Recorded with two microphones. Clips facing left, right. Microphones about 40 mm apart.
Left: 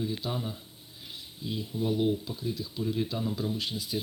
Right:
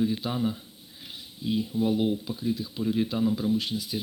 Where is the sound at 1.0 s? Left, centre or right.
Right.